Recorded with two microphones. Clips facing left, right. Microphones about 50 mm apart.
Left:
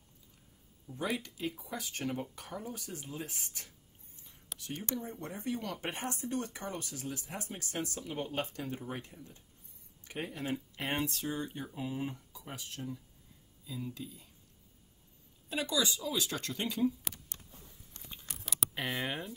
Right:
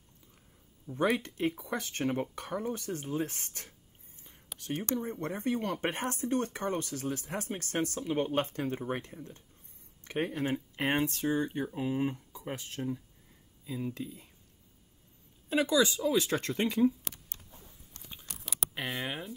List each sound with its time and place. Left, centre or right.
1.1 s speech: right
3.3 s speech: right
4.6 s speech: right
7.3 s speech: right
15.5 s speech: right
17.4 s a sound: right
18.4 s a sound: centre